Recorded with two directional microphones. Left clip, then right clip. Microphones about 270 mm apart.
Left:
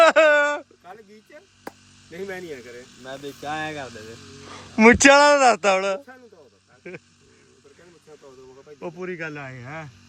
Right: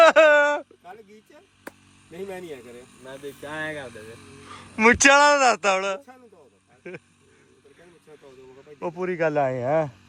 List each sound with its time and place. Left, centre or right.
0.0 s a sound: centre
2.0 s speech: centre
3.4 s speech: centre
4.1 s speech: right
4.4 s speech: centre
8.1 s speech: centre